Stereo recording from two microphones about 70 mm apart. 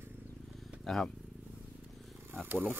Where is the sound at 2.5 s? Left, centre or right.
Right.